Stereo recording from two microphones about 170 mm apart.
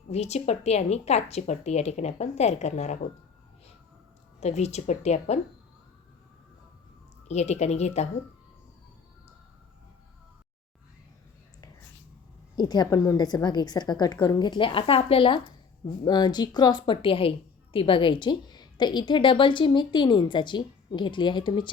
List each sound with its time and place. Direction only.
0.1 s speech: 40° left (ahead or behind)
4.4 s speech: 40° left (ahead or behind)
7.3 s speech: 40° left (ahead or behind)
12.5 s a woman's voice: 25° left (ahead or behind)